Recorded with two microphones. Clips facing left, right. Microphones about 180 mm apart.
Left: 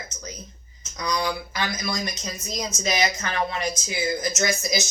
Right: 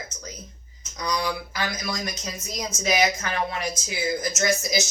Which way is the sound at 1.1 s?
5° right (ahead or behind).